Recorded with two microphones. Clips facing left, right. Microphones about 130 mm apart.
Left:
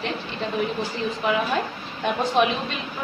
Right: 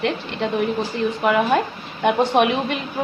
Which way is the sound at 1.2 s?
60° right (ahead or behind).